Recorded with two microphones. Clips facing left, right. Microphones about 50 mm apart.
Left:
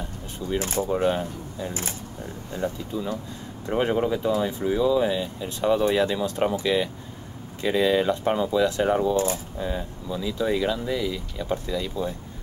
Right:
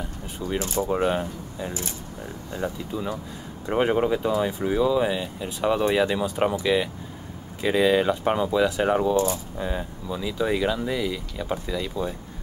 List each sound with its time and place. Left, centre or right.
0.6 s speech: left
0.8 s speech: centre